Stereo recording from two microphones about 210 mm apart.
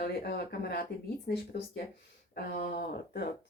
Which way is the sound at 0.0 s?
50° left (ahead or behind).